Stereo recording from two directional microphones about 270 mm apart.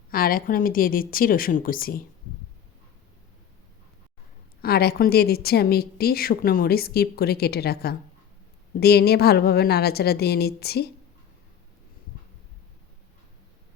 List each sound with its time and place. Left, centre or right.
0.1 s a woman's voice: left
4.6 s a woman's voice: left